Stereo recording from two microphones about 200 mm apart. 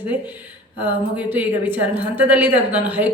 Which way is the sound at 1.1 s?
10° right (ahead or behind).